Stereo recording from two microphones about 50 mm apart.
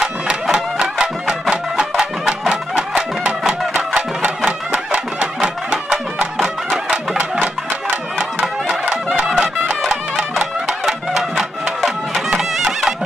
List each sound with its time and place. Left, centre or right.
0.0 s music: centre
8.8 s music: centre
10.7 s music: centre